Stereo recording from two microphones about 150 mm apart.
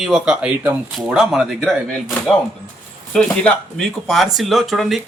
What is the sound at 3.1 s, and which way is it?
Speech, 5° left (ahead or behind).